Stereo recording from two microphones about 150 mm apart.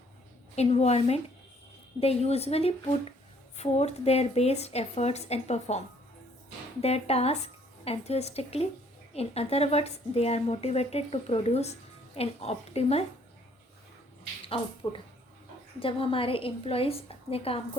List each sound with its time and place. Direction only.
0.5 s a woman's voice: 45° left (ahead or behind)
6.8 s a woman's voice: 45° left (ahead or behind)
14.4 s a woman's voice: 40° left (ahead or behind)